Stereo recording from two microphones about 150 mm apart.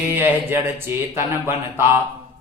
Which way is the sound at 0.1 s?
15° right (ahead or behind).